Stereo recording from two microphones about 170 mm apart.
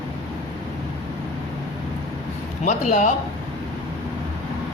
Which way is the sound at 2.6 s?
45° left (ahead or behind).